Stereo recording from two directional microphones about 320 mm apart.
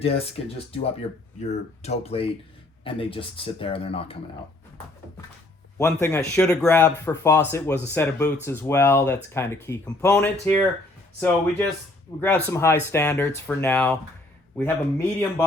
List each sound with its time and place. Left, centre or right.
0.0 s speech: centre
5.7 s speech: centre
12.2 s speech: centre